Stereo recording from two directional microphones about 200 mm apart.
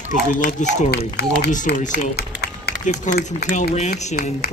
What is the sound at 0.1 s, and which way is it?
Speech, 40° left (ahead or behind).